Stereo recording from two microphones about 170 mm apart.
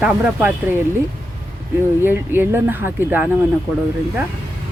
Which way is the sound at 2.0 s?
15° right (ahead or behind).